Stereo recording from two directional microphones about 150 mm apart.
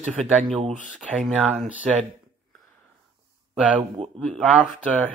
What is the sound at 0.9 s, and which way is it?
Speech, 5° right (ahead or behind).